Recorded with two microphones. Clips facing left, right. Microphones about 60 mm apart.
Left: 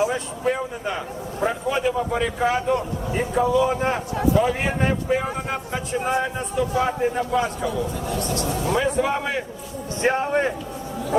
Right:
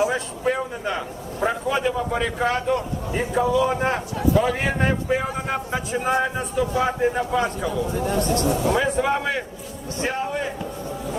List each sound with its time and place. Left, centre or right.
0.1 s a man's voice: centre
7.7 s speech: right
8.6 s a man's voice: centre
10.0 s a man's voice: left